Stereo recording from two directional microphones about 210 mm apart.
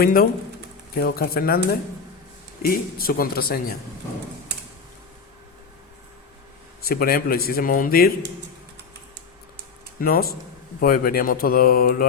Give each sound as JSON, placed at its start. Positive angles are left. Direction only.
{"t": 0.0, "sound": "speech", "side_deg": 45}
{"t": 6.8, "sound": "speech", "side_deg": 45}
{"t": 10.0, "sound": "speech", "side_deg": 45}